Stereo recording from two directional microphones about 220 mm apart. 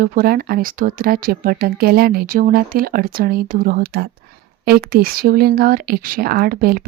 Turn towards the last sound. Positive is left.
turn(degrees=-40)  # may be behind; listen again after turning